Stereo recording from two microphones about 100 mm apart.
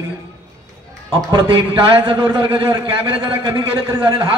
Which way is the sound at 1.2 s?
45° right (ahead or behind).